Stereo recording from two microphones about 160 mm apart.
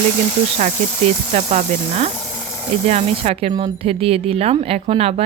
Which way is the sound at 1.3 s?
45° right (ahead or behind).